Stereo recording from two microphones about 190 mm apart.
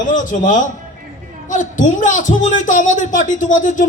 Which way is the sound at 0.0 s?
40° left (ahead or behind).